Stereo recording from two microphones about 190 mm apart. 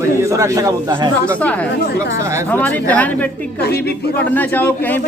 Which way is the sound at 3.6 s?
55° left (ahead or behind).